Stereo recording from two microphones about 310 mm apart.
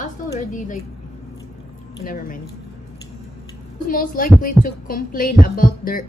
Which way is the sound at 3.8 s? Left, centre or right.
Left.